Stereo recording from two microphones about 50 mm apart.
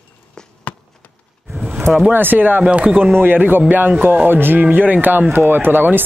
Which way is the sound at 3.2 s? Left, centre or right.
Right.